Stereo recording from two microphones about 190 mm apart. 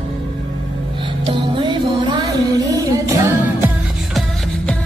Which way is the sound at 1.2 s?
25° right (ahead or behind).